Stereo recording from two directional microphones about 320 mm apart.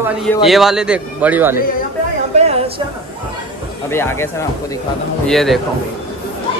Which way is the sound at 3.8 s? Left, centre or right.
Centre.